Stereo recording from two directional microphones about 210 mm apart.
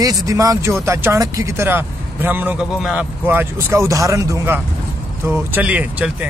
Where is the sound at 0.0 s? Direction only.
15° right (ahead or behind).